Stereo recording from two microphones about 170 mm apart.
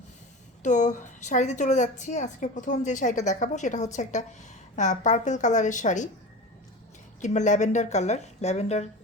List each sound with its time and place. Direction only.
0.6 s a woman's voice: 45° left (ahead or behind)
7.2 s speech: 45° left (ahead or behind)